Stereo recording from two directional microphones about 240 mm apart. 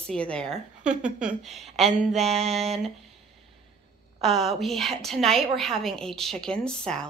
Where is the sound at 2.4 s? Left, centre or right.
Right.